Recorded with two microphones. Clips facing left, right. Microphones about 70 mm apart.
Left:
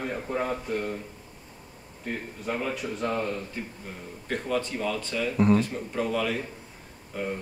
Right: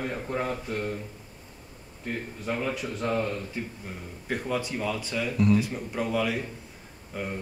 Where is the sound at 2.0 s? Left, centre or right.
Centre.